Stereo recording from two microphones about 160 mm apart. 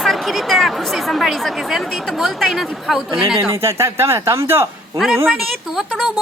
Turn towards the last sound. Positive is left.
turn(degrees=0)  # may be behind; listen again after turning